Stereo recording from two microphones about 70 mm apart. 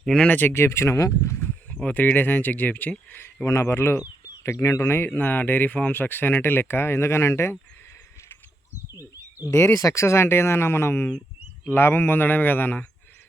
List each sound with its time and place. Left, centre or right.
0.2 s speech: left
1.7 s speech: left
3.4 s speech: left
4.4 s speech: left
8.9 s a sound: right
9.5 s speech: left